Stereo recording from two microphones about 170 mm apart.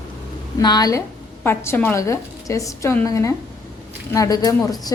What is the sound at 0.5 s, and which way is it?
A woman's voice, 25° left (ahead or behind).